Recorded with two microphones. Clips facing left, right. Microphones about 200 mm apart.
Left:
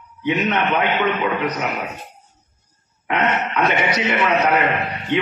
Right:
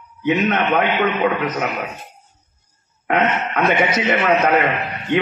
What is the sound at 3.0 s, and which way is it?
A man's voice, 50° right (ahead or behind).